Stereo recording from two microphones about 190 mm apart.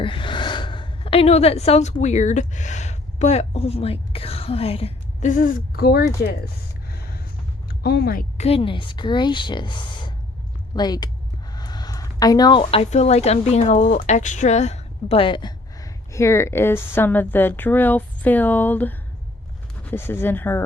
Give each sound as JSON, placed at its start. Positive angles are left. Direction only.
{"t": 0.0, "sound": "a woman's voice", "side_deg": 25}
{"t": 7.8, "sound": "speech", "side_deg": 60}
{"t": 8.4, "sound": "a woman's voice", "side_deg": 30}